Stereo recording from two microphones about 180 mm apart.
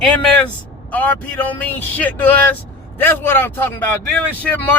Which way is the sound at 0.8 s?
10° left (ahead or behind).